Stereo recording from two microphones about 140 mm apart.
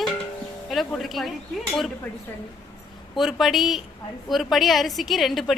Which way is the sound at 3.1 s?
Centre (ahead or behind).